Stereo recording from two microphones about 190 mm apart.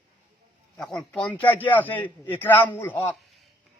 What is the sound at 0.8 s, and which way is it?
A man's voice, 5° left (ahead or behind).